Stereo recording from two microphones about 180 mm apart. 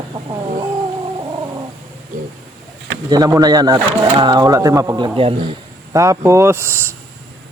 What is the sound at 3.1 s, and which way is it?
Speech, 20° right (ahead or behind).